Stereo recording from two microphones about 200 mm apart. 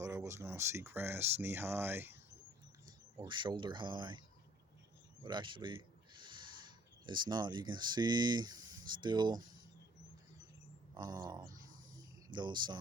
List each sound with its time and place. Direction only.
0.0 s speech: 15° right (ahead or behind)
5.2 s speech: 25° right (ahead or behind)
10.9 s speech: 20° right (ahead or behind)